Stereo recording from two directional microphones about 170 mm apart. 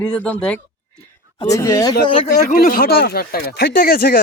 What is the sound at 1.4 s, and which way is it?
Speech, 20° left (ahead or behind).